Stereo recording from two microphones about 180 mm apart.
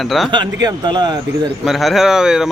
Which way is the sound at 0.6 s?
25° right (ahead or behind).